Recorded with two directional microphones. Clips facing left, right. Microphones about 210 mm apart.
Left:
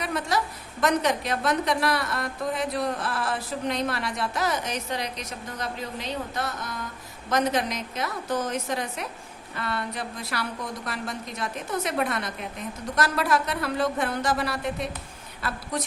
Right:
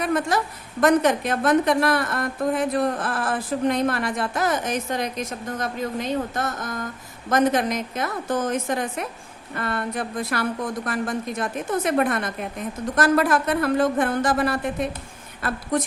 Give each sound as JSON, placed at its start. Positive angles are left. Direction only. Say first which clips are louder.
{"t": 0.0, "sound": "a woman's voice", "louder": "right 5 dB", "side_deg": -50}